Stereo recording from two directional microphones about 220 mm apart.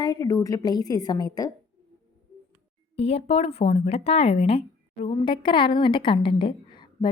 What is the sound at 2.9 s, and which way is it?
Speech, 25° left (ahead or behind).